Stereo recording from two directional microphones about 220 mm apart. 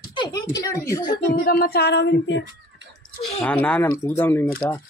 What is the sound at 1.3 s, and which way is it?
Female singing, 45° left (ahead or behind).